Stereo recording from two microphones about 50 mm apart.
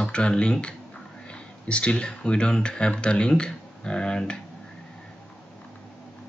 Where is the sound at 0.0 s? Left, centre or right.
Left.